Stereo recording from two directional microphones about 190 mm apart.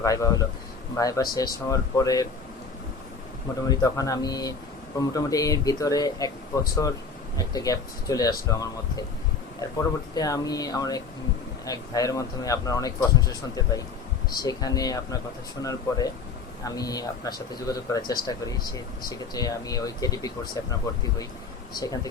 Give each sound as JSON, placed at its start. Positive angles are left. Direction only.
{"t": 0.0, "sound": "speech", "side_deg": 15}
{"t": 3.7, "sound": "speech", "side_deg": 20}
{"t": 7.3, "sound": "speech", "side_deg": 20}